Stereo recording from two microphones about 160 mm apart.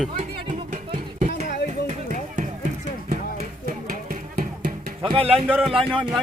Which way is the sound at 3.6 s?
65° right (ahead or behind).